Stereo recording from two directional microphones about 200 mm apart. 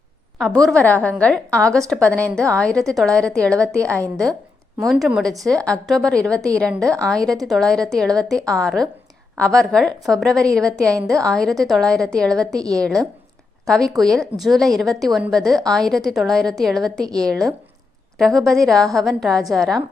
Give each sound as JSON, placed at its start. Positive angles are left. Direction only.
{"t": 0.3, "sound": "a woman's voice", "side_deg": 0}
{"t": 4.9, "sound": "a woman's voice", "side_deg": 0}